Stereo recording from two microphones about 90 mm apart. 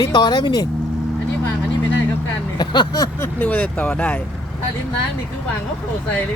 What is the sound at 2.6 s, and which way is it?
Speech, 50° left (ahead or behind).